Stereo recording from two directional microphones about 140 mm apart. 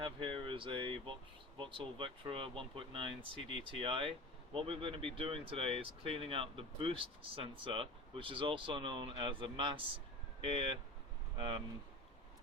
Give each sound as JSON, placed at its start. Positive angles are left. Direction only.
{"t": 0.0, "sound": "speech", "side_deg": -35}